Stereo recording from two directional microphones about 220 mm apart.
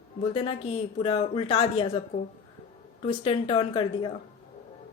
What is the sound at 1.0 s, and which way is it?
Speech, 30° left (ahead or behind).